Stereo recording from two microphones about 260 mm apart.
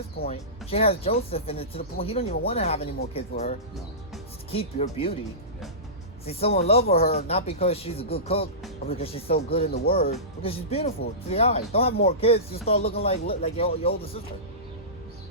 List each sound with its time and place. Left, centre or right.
0.3 s speech: left
6.2 s speech: left